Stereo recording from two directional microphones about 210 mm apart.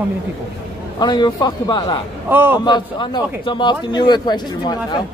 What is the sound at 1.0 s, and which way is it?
A man's voice, 20° left (ahead or behind).